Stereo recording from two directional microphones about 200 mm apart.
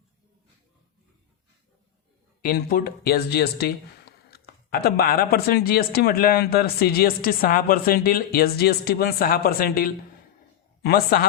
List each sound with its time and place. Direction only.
2.4 s speech: 50° left (ahead or behind)